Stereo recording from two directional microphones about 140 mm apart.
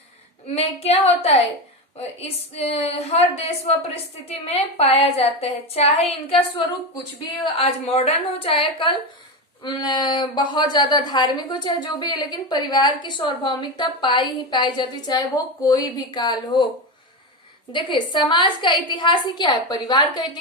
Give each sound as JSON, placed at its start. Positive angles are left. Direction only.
{"t": 0.4, "sound": "a woman's voice", "side_deg": 50}
{"t": 2.6, "sound": "a woman's voice", "side_deg": 45}
{"t": 7.5, "sound": "a woman's voice", "side_deg": 45}
{"t": 17.7, "sound": "a woman's voice", "side_deg": 35}